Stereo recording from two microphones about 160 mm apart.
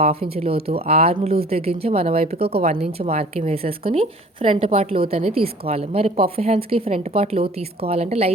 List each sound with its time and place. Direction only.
0.3 s a woman's voice: 40° right (ahead or behind)